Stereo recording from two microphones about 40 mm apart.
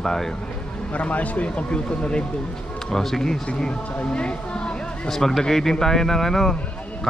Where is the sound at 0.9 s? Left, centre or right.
Left.